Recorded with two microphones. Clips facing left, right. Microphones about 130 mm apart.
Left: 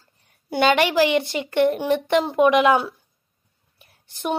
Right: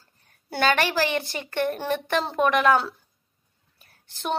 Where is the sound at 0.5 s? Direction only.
15° left (ahead or behind).